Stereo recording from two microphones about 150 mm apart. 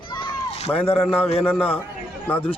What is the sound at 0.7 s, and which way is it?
Speech, 15° left (ahead or behind).